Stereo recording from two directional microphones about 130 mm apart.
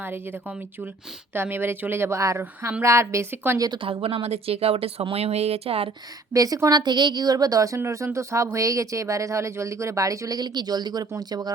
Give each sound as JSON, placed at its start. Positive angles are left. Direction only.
{"t": 1.3, "sound": "a woman's voice", "side_deg": -15}
{"t": 3.7, "sound": "speech", "side_deg": -45}
{"t": 6.3, "sound": "a woman's voice", "side_deg": -25}